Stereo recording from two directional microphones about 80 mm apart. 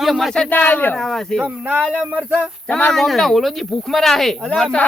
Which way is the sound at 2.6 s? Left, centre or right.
Left.